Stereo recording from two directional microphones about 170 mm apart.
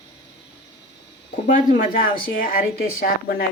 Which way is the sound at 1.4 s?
55° left (ahead or behind).